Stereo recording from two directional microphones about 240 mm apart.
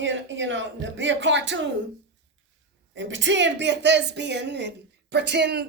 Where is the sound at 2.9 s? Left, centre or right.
Right.